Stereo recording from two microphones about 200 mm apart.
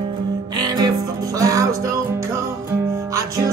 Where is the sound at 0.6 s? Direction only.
20° right (ahead or behind).